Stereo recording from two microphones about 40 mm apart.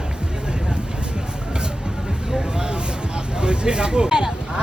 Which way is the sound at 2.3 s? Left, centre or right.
Centre.